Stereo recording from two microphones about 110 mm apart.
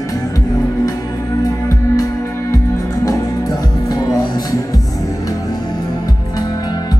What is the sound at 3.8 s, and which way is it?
Music, 35° left (ahead or behind).